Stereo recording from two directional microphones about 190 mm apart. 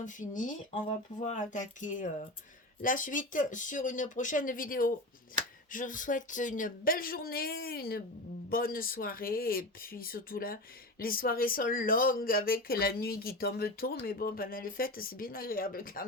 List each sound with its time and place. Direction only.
0.0 s speech: 40° left (ahead or behind)